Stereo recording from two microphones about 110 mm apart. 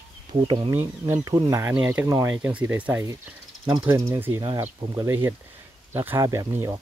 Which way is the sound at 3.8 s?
25° right (ahead or behind).